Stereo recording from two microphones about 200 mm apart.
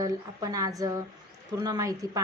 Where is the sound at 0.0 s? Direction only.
15° right (ahead or behind).